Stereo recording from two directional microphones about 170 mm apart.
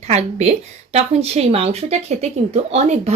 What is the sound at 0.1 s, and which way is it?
A woman's voice, 40° right (ahead or behind).